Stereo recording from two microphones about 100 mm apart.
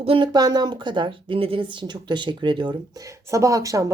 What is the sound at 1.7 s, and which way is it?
Speech, 50° right (ahead or behind).